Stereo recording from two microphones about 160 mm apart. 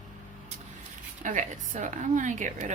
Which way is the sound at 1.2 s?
50° right (ahead or behind).